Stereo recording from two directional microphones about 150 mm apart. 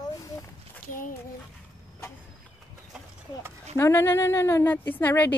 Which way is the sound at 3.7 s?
15° left (ahead or behind).